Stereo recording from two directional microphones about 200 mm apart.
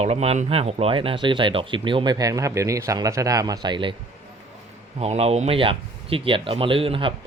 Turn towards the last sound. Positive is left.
turn(degrees=-25)  # may be behind; listen again after turning